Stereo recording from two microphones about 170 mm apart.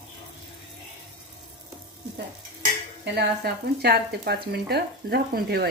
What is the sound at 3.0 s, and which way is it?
Speech, 75° right (ahead or behind).